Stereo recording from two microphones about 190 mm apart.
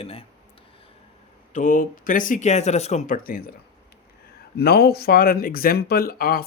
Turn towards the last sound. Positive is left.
turn(degrees=50)  # may be behind; listen again after turning